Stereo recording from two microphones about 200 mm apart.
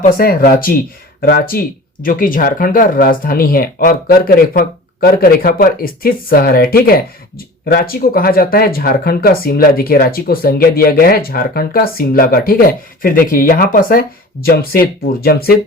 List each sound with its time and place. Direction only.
0.2 s speech: 45° left (ahead or behind)